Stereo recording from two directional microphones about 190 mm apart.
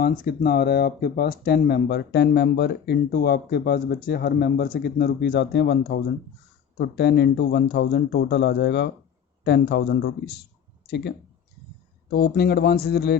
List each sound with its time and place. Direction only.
0.0 s speech: 55° left (ahead or behind)
12.1 s speech: 55° left (ahead or behind)